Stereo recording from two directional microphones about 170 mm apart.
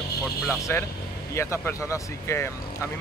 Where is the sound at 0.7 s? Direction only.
15° left (ahead or behind).